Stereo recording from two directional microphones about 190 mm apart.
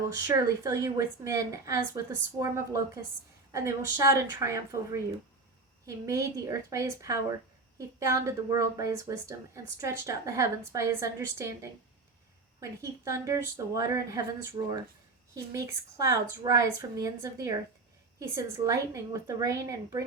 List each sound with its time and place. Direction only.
0.2 s a woman's voice: 20° right (ahead or behind)